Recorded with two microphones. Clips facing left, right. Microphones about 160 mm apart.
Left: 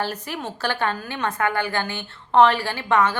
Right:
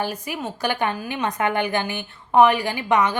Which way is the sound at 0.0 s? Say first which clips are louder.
Right 1 dB; 10° right (ahead or behind).